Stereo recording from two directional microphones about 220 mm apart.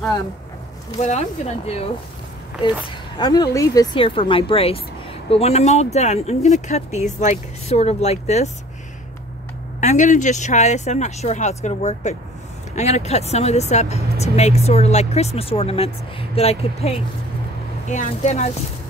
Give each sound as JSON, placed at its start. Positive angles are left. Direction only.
{"t": 1.0, "sound": "speech", "side_deg": 30}
{"t": 3.2, "sound": "speech", "side_deg": 20}
{"t": 9.8, "sound": "speech", "side_deg": 35}